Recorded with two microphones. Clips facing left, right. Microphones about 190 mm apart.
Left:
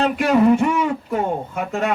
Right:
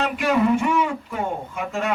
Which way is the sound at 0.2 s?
40° left (ahead or behind).